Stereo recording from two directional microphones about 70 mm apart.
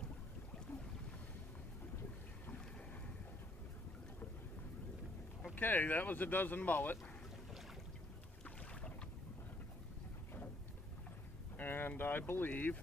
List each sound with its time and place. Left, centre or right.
5.6 s speech: left
11.5 s speech: left